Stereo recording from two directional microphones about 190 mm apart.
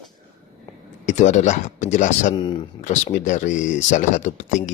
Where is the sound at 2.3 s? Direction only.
25° left (ahead or behind).